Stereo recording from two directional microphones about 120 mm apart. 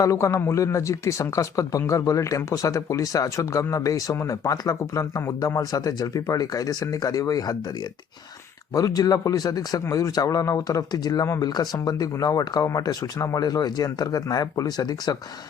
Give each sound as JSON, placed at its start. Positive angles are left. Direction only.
{"t": 0.0, "sound": "speech", "side_deg": 25}
{"t": 8.7, "sound": "speech", "side_deg": 30}